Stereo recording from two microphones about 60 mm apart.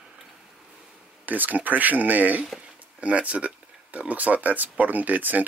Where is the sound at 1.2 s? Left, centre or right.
Right.